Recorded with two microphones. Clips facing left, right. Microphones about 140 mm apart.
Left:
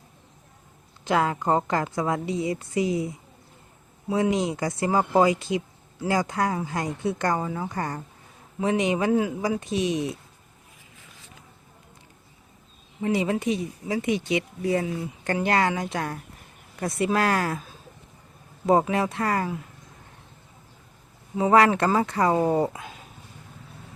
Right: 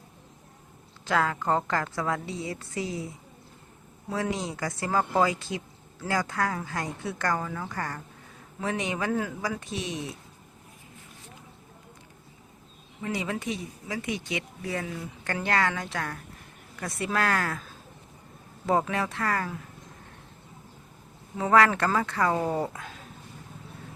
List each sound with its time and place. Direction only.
1.0 s a woman's voice: 20° left (ahead or behind)
4.1 s speech: 20° left (ahead or behind)
13.0 s speech: 25° left (ahead or behind)
18.6 s speech: 20° left (ahead or behind)
21.3 s speech: 20° left (ahead or behind)